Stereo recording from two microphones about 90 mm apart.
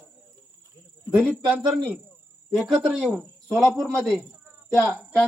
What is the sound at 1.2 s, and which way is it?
Speech, 15° right (ahead or behind).